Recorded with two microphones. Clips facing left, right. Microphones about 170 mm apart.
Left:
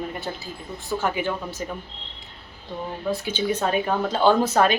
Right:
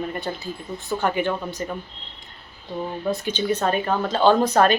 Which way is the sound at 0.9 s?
5° left (ahead or behind).